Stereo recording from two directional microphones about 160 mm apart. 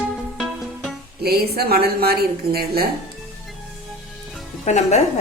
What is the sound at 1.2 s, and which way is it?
A woman's voice, 75° right (ahead or behind).